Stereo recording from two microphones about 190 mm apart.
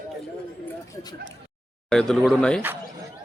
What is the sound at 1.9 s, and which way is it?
Speech, 5° left (ahead or behind).